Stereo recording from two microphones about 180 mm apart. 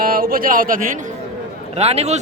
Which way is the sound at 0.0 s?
55° right (ahead or behind).